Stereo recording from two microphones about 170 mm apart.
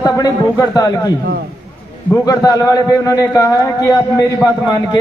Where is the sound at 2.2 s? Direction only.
20° left (ahead or behind).